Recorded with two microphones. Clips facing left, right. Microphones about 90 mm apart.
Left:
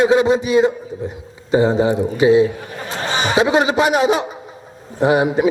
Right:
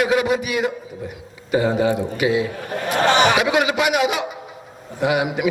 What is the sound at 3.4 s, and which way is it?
A man's voice, 30° left (ahead or behind).